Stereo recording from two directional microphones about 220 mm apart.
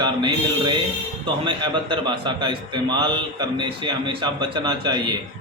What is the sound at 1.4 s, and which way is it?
A man's voice, 20° right (ahead or behind).